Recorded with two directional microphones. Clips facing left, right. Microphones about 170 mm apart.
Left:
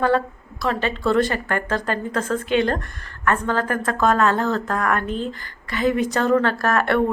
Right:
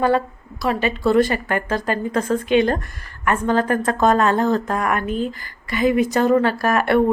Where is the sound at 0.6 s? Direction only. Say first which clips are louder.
Right 3 dB; 10° right (ahead or behind).